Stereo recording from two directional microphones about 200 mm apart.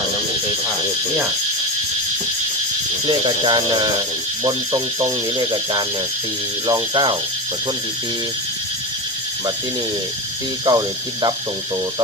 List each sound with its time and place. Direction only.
3.1 s speech: 20° right (ahead or behind)
10.7 s speech: 20° right (ahead or behind)